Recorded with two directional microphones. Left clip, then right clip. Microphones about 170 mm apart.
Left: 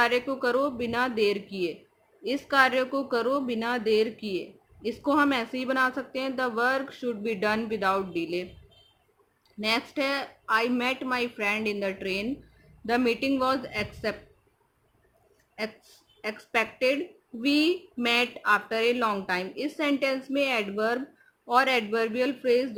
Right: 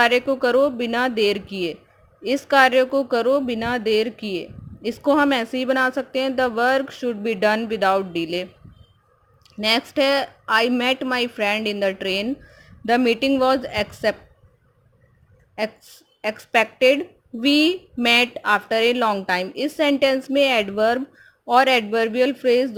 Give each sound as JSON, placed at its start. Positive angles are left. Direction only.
{"t": 0.0, "sound": "speech", "side_deg": -45}
{"t": 9.6, "sound": "speech", "side_deg": -45}
{"t": 16.2, "sound": "speech", "side_deg": -50}